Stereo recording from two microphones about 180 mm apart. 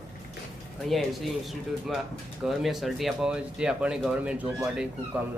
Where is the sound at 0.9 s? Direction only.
Centre (ahead or behind).